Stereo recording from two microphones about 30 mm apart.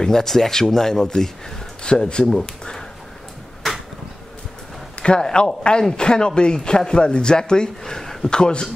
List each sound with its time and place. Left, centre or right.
0.0 s speech: centre
1.8 s speech: left
2.2 s speech: centre
5.2 s speech: left
8.3 s speech: left